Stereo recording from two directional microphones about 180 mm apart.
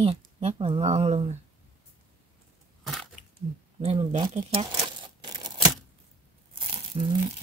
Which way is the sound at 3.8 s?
35° right (ahead or behind).